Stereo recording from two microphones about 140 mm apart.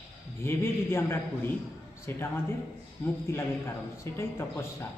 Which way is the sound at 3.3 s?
20° left (ahead or behind).